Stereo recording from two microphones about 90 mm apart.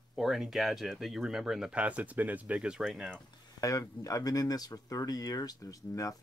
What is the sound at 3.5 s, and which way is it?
Speech, 40° left (ahead or behind).